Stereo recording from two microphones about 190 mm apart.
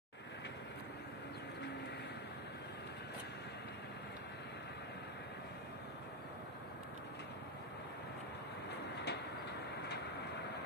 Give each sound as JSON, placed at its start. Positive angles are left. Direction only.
{"t": 8.6, "sound": "vehicle", "side_deg": 60}